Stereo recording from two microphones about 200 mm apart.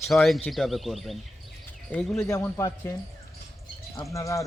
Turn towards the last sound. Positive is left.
turn(degrees=15)  # may be behind; listen again after turning